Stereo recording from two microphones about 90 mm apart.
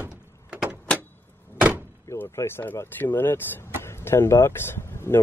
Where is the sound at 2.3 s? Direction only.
25° left (ahead or behind).